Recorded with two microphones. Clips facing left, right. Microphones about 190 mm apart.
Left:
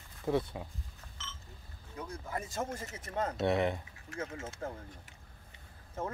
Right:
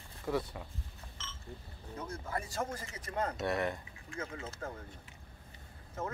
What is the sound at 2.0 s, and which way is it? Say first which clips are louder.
Speech: even; 15° left (ahead or behind).